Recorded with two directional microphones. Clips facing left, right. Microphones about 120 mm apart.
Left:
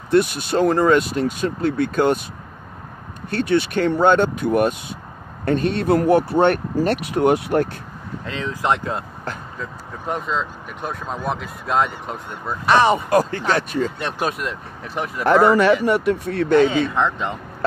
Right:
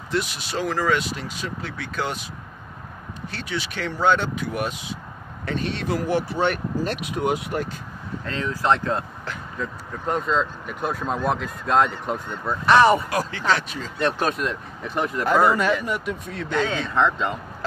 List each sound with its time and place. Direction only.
0.1 s speech: 50° left (ahead or behind)
3.3 s speech: 55° left (ahead or behind)
8.3 s speech: 15° left (ahead or behind)
12.6 s speech: 15° left (ahead or behind)
13.1 s speech: 50° left (ahead or behind)
13.9 s speech: 10° left (ahead or behind)
15.2 s speech: 65° left (ahead or behind)
16.9 s speech: 15° left (ahead or behind)